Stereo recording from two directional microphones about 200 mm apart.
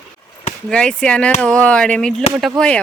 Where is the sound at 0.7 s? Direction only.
5° left (ahead or behind).